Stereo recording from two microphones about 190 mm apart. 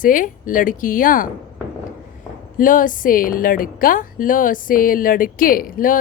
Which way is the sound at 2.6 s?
45° left (ahead or behind).